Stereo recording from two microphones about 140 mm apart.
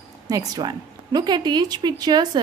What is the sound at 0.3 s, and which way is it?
A woman's voice, 30° right (ahead or behind).